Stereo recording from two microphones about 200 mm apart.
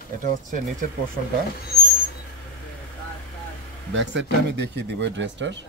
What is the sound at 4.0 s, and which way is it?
Speech, 60° right (ahead or behind).